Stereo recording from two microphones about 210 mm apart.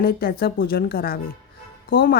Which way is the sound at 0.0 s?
45° left (ahead or behind).